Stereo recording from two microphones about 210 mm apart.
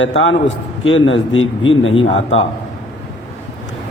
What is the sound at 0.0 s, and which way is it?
Speech, 65° left (ahead or behind).